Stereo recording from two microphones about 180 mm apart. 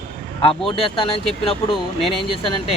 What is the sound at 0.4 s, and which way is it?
Speech, 30° left (ahead or behind).